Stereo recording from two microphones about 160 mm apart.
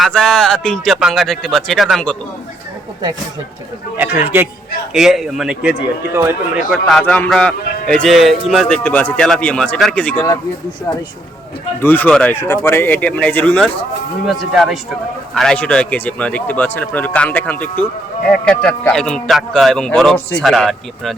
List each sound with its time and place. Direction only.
0.0 s speech: 5° left (ahead or behind)
3.9 s speech: 10° right (ahead or behind); by 10.2 s 10° left (ahead or behind)
11.8 s speech: 10° left (ahead or behind)